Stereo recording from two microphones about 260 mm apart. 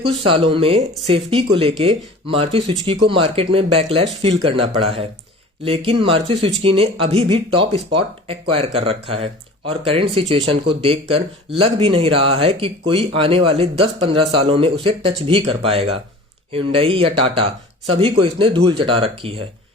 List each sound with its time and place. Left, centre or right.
0.0 s speech: right